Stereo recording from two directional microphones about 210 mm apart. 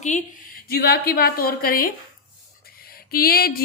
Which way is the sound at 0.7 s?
45° left (ahead or behind).